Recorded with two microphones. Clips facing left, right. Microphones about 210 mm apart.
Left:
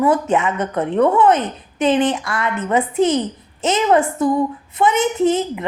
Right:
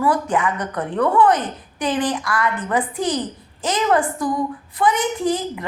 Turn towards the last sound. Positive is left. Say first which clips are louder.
# left 5 dB
turn(degrees=25)  # may be behind; listen again after turning